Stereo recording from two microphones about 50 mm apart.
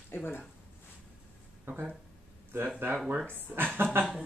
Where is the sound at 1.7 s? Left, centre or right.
Right.